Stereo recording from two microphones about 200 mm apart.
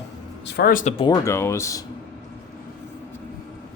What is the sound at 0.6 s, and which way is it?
Speech, 45° left (ahead or behind).